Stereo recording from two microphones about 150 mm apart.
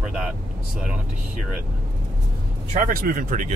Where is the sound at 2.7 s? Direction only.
70° right (ahead or behind).